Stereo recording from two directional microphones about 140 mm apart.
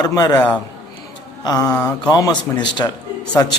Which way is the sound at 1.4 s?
25° left (ahead or behind).